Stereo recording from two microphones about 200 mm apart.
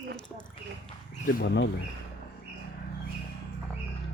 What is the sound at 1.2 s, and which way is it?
Speech, 55° left (ahead or behind).